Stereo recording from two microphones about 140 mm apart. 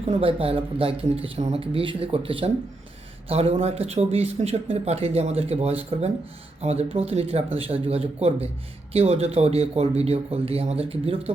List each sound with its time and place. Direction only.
0.1 s speech: 40° right (ahead or behind)